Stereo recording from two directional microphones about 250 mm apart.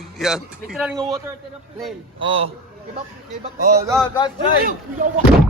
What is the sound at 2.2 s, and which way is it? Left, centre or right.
Speech, right.